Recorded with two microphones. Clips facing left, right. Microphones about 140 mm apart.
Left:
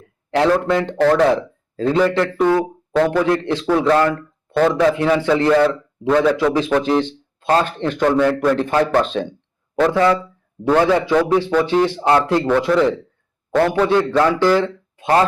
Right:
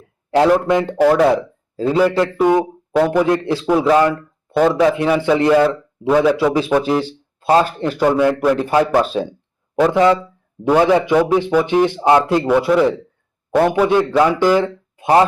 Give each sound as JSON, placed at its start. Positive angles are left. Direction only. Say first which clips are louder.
{"t": 0.3, "sound": "a man's voice", "louder": "right 2 dB", "side_deg": -15}
{"t": 3.5, "sound": "a man's voice", "louder": "right 2 dB", "side_deg": -10}